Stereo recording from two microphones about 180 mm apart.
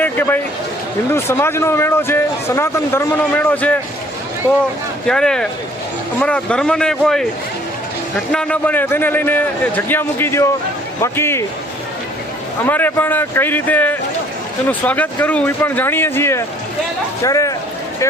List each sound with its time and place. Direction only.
0.0 s a sound: 10° left (ahead or behind)
1.1 s a man's voice: 15° left (ahead or behind)
5.0 s a man's voice: 5° left (ahead or behind)
8.3 s a man's voice: 5° left (ahead or behind)
12.6 s a man's voice: 10° left (ahead or behind)